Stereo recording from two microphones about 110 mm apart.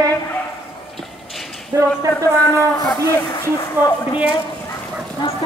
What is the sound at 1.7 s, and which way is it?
Speech, 30° right (ahead or behind).